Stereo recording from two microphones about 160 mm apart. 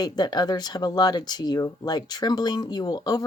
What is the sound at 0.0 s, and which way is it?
Speech, 25° left (ahead or behind).